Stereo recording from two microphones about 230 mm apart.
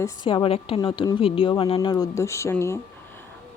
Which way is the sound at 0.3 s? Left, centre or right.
Left.